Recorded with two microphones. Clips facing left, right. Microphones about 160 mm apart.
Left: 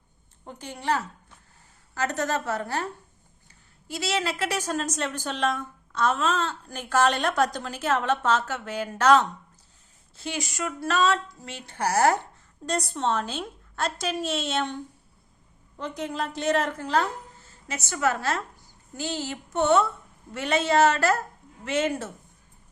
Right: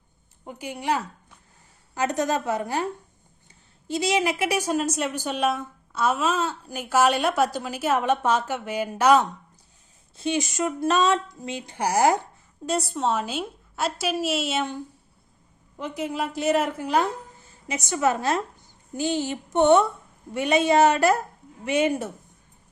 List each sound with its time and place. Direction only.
0.4 s a woman's voice: 10° right (ahead or behind)
15.8 s a woman's voice: 5° right (ahead or behind)